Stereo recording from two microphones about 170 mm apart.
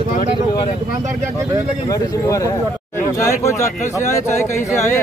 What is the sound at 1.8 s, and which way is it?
A man's voice, 20° left (ahead or behind).